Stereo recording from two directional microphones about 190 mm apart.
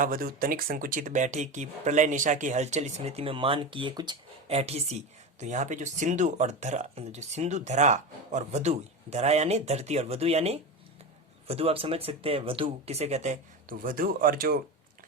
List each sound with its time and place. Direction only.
0.0 s speech: 50° right (ahead or behind)